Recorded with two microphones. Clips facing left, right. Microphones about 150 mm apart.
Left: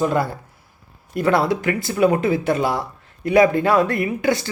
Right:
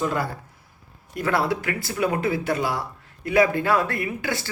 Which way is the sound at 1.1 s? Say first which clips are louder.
Left 5 dB; 25° left (ahead or behind).